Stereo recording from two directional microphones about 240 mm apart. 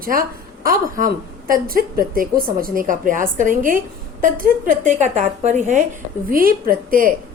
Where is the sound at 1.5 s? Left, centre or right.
Right.